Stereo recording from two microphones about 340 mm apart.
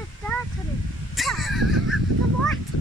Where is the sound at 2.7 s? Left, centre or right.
Left.